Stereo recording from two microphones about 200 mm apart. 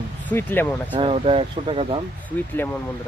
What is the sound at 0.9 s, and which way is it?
Speech, 30° right (ahead or behind).